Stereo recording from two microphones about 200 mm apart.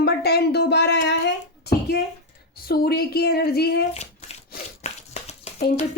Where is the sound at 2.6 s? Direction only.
50° left (ahead or behind).